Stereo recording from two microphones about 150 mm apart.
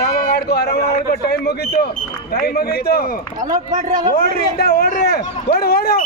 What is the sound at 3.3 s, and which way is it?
Speech, 60° right (ahead or behind).